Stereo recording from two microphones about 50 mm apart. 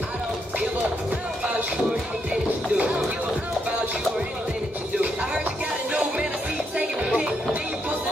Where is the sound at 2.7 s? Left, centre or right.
Right.